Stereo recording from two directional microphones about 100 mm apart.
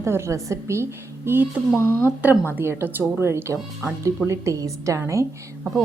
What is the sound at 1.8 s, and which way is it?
Speech, 25° left (ahead or behind).